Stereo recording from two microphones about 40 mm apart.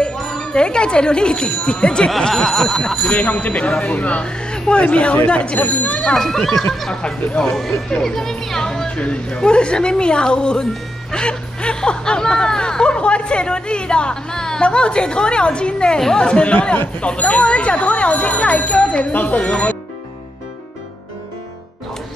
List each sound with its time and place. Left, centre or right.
0.2 s music: centre
0.5 s speech: left
2.0 s speech: centre
3.0 s speech: left
4.2 s speech: left
5.9 s speech: centre
6.9 s speech: left
19.1 s speech: left